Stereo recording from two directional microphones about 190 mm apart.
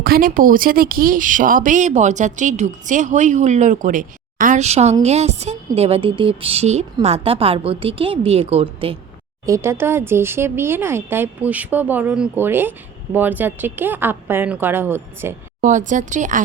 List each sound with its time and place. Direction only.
0.0 s a woman's voice: 50° right (ahead or behind); by 9.0 s 30° right (ahead or behind)
9.5 s speech: 15° right (ahead or behind)
15.6 s speech: 40° right (ahead or behind)